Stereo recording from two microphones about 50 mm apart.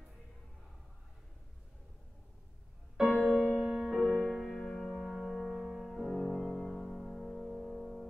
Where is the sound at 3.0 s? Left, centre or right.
Centre.